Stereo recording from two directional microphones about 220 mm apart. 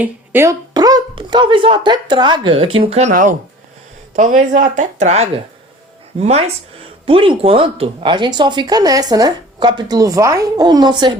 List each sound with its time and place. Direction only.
0.0 s speech: 10° right (ahead or behind)